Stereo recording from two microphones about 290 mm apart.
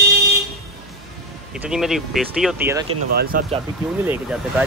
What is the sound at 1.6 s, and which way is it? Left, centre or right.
Speech, centre.